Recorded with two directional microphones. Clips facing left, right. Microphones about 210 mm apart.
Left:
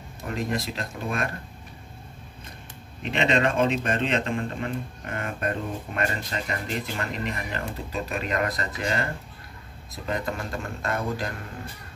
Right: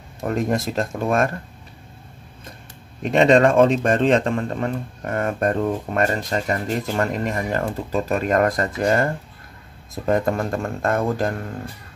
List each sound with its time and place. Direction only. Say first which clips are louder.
0.2 s speech: right 7 dB; 50° right (ahead or behind)
3.0 s speech: right 9 dB; 45° right (ahead or behind)